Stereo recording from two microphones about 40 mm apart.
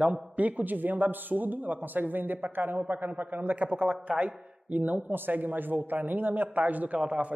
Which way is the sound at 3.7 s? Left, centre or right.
Right.